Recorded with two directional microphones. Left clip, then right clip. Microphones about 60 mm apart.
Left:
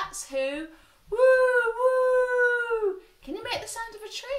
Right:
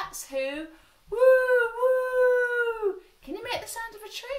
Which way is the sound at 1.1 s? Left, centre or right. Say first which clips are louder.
Even; right.